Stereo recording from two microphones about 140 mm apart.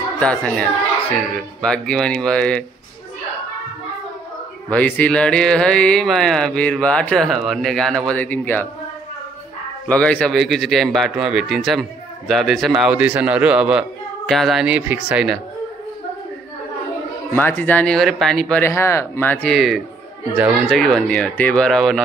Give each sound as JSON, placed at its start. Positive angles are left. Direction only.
{"t": 0.2, "sound": "speech", "side_deg": 5}
{"t": 4.6, "sound": "speech", "side_deg": 10}
{"t": 9.8, "sound": "speech", "side_deg": 10}
{"t": 17.4, "sound": "speech", "side_deg": 15}
{"t": 18.6, "sound": "speech", "side_deg": 20}
{"t": 19.5, "sound": "speech", "side_deg": 0}